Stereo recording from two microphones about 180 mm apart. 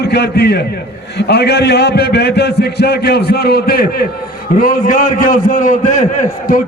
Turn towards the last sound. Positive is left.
turn(degrees=45)  # may be behind; listen again after turning